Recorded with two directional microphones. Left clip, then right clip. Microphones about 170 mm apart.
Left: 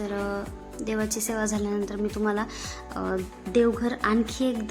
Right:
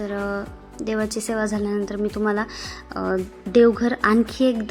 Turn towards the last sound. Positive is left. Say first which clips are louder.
# right 6 dB
turn(degrees=-25)  # may be behind; listen again after turning